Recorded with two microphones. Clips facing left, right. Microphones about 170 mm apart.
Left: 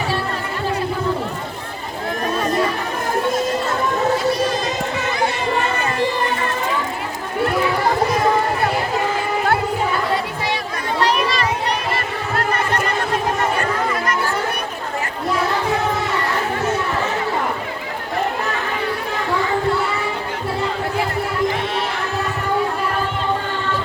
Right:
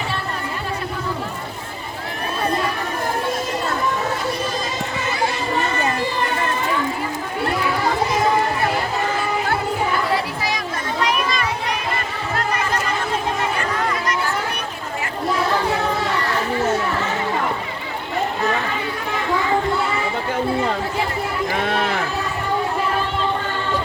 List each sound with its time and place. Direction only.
11.0 s children playing: 35° left (ahead or behind)